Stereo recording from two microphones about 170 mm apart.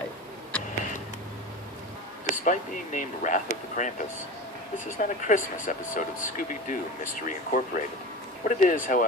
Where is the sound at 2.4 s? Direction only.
50° left (ahead or behind).